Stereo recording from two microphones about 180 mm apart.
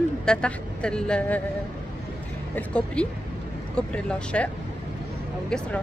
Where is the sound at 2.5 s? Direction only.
5° left (ahead or behind).